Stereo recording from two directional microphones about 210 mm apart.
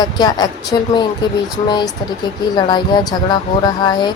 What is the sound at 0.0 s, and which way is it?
Speech, 20° left (ahead or behind).